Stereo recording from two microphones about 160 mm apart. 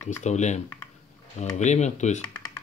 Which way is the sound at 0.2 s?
45° left (ahead or behind).